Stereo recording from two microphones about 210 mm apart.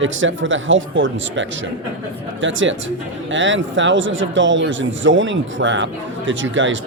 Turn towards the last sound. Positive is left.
turn(degrees=-65)  # may be behind; listen again after turning